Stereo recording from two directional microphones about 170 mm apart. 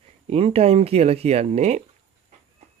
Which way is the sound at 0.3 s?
35° right (ahead or behind).